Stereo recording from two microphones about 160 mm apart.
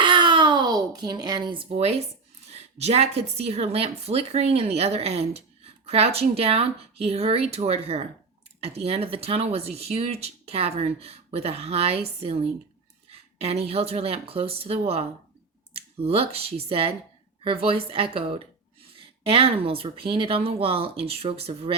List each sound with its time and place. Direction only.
0.0 s a child's voice: 30° right (ahead or behind)